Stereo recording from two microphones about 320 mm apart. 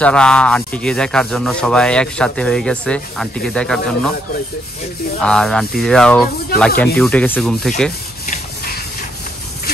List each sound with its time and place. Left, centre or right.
0.0 s rub: centre
5.2 s rub: centre
8.3 s a sound: left